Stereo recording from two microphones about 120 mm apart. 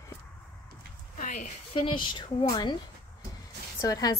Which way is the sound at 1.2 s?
90° left.